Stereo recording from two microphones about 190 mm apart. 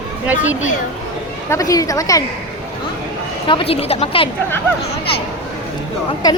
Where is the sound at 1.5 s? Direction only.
20° left (ahead or behind).